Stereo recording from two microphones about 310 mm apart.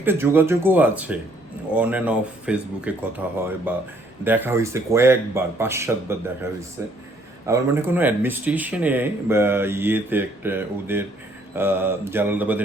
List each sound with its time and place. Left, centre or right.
0.0 s speech: centre